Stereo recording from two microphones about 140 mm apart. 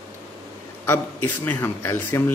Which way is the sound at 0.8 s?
15° left (ahead or behind).